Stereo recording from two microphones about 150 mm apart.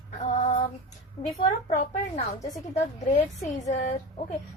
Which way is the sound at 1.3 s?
60° left (ahead or behind).